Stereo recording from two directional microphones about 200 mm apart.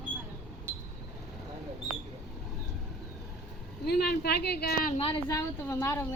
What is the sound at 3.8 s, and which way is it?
Speech, 50° left (ahead or behind).